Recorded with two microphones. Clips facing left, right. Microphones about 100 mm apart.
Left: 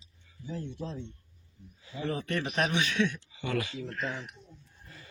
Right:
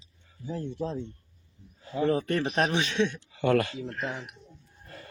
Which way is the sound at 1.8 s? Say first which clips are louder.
Right 8 dB; 45° right (ahead or behind).